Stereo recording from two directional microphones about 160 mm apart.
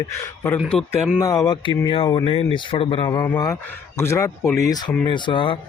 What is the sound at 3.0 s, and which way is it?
Speech, 20° left (ahead or behind).